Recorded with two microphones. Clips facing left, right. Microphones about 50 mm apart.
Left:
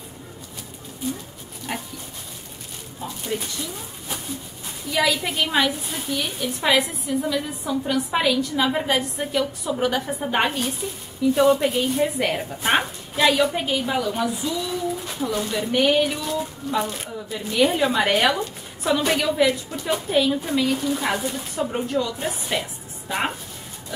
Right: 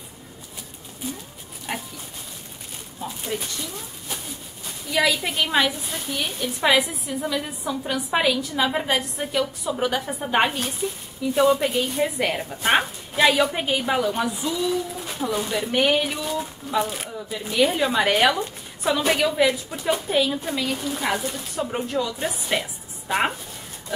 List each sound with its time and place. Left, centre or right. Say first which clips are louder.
1.7 s speech: even; centre
3.0 s a sound: left 1 dB; centre
4.9 s a woman's voice: even; centre
23.0 s speech: right 3 dB; centre